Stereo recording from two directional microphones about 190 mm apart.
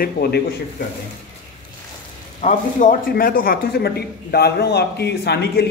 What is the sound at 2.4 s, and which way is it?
A man's voice, 40° left (ahead or behind).